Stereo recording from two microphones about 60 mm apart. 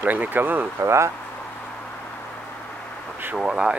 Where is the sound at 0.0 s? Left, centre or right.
Right.